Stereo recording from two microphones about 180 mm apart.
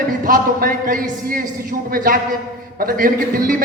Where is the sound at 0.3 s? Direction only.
50° right (ahead or behind).